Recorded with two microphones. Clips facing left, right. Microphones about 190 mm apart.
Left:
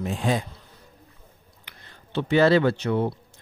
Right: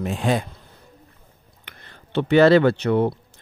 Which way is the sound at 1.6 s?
65° right (ahead or behind).